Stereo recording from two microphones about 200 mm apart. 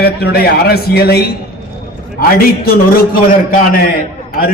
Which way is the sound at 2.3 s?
50° left (ahead or behind).